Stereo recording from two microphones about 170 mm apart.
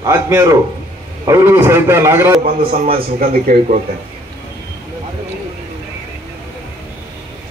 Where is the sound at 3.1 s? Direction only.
55° right (ahead or behind).